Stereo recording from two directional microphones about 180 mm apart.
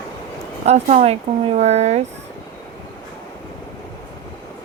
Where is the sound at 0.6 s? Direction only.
40° right (ahead or behind).